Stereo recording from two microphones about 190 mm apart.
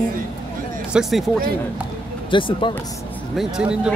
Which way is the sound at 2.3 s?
25° left (ahead or behind).